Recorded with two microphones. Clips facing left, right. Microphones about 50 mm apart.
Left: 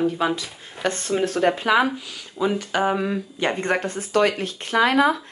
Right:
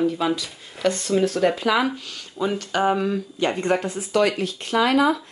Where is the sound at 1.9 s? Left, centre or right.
Centre.